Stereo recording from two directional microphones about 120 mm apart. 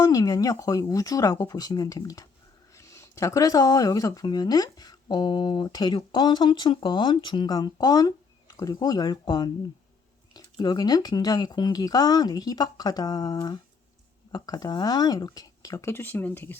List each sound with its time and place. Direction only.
0.0 s speech: 30° left (ahead or behind)